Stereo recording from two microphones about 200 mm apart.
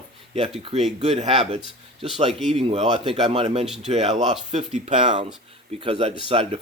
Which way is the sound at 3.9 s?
35° right (ahead or behind).